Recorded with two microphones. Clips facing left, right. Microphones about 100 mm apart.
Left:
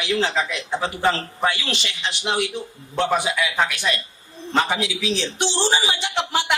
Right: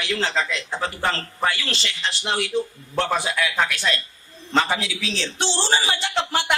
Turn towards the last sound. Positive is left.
turn(degrees=15)  # may be behind; listen again after turning